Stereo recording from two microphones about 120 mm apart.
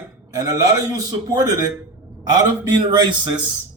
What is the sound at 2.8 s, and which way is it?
Speech, 35° right (ahead or behind).